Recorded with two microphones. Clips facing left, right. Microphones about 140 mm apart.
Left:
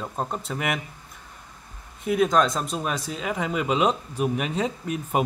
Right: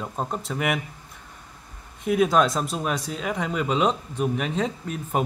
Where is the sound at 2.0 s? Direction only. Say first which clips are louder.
Right 1 dB; centre (ahead or behind).